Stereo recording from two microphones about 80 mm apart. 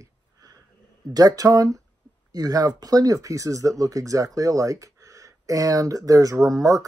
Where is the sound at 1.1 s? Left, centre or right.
Right.